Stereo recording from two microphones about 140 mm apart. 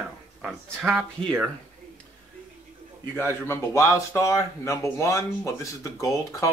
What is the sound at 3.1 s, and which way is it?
Speech, 15° left (ahead or behind).